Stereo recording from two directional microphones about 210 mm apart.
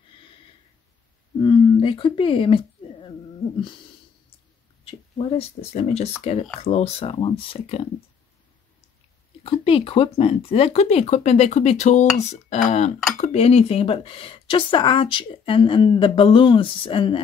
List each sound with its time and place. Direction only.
1.4 s a sound: 25° left (ahead or behind)
4.8 s a woman's voice: 30° left (ahead or behind)
9.4 s a woman's voice: 25° left (ahead or behind)